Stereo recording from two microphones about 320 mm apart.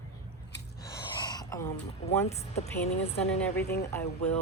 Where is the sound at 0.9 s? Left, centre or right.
Centre.